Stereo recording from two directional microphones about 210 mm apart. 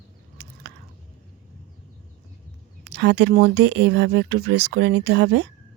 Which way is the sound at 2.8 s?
55° right (ahead or behind).